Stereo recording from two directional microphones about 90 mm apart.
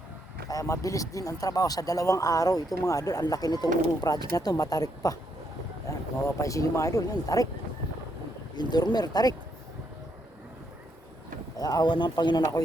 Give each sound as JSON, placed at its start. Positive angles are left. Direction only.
{"t": 0.4, "sound": "speech", "side_deg": 35}
{"t": 6.2, "sound": "speech", "side_deg": 35}
{"t": 8.5, "sound": "speech", "side_deg": 50}
{"t": 11.5, "sound": "speech", "side_deg": 45}